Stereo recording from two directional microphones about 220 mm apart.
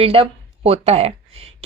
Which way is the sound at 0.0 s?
25° right (ahead or behind).